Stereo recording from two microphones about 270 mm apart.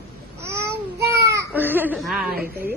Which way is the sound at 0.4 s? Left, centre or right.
Centre.